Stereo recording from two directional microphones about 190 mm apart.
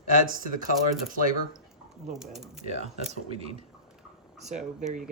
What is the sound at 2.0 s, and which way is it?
Speech, centre (ahead or behind).